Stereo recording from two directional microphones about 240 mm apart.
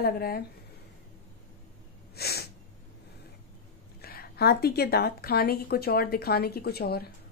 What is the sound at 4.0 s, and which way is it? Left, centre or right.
A woman's voice, left.